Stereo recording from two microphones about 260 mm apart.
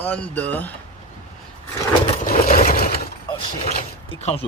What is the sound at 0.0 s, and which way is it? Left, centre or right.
Speech, centre.